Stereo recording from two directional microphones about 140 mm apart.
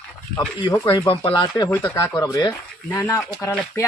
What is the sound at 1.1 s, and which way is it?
Speech, 35° left (ahead or behind).